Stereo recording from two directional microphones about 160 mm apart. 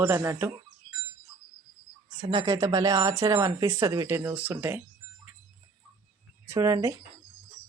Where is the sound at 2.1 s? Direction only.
30° right (ahead or behind); by 4.8 s 10° right (ahead or behind).